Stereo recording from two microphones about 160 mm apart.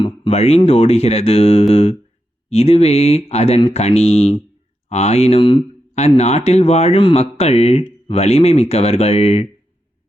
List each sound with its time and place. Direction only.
0.0 s speech: 40° left (ahead or behind)